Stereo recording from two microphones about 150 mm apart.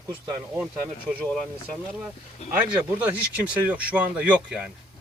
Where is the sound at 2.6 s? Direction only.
10° right (ahead or behind).